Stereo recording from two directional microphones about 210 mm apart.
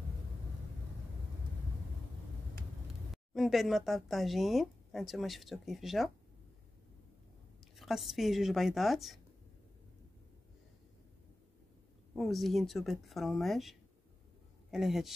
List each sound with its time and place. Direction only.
3.3 s speech: centre (ahead or behind)
7.7 s speech: centre (ahead or behind)
12.2 s speech: centre (ahead or behind)